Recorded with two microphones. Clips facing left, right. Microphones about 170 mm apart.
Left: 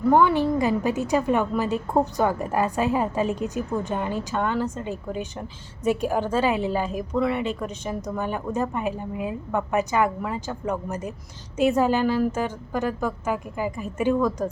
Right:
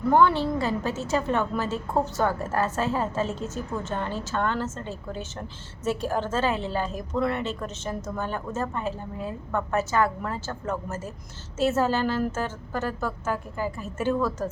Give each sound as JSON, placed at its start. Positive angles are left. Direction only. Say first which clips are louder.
{"t": 0.1, "sound": "a woman's voice", "louder": "left 2 dB", "side_deg": 10}